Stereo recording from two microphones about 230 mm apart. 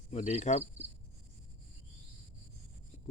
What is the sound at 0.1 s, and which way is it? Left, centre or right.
Cricket, left.